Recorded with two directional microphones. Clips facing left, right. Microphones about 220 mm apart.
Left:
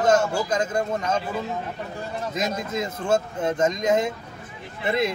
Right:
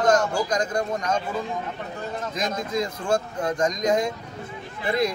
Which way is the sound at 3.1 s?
25° left (ahead or behind).